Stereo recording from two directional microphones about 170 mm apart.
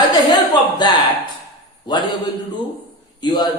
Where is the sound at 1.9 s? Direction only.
25° left (ahead or behind).